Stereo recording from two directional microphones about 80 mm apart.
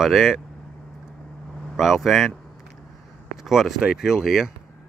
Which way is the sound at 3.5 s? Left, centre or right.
Centre.